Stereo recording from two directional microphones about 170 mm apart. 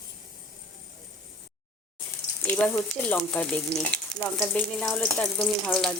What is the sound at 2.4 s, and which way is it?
Speech, 10° left (ahead or behind).